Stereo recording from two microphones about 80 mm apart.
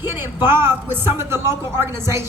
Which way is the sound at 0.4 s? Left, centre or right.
Right.